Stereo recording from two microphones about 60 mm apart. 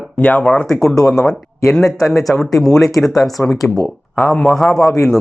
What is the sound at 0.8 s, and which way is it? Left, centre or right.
A man's voice, centre.